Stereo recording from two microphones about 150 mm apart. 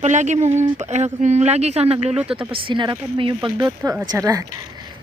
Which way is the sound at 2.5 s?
35° right (ahead or behind).